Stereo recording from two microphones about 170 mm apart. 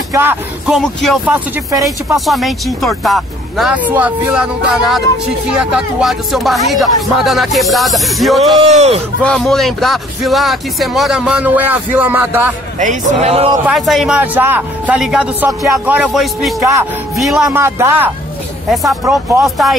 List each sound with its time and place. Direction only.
0.1 s speech: 10° right (ahead or behind)
0.7 s speech: centre (ahead or behind)
1.7 s speech: 20° right (ahead or behind)
2.1 s speech: centre (ahead or behind)
8.7 s a man's voice: 40° right (ahead or behind)
9.2 s speech: 5° left (ahead or behind); by 12.5 s 10° right (ahead or behind)
12.7 s a man's voice: 45° right (ahead or behind)
13.7 s speech: centre (ahead or behind)
17.5 s speech: 15° right (ahead or behind)
18.7 s speech: centre (ahead or behind)